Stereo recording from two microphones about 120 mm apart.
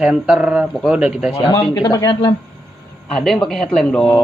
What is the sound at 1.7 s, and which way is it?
Speech, 40° left (ahead or behind).